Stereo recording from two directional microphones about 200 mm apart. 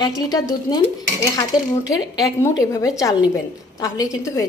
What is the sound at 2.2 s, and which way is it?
Speech, 15° left (ahead or behind).